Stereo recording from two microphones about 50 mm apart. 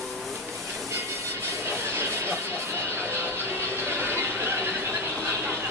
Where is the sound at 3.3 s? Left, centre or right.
Right.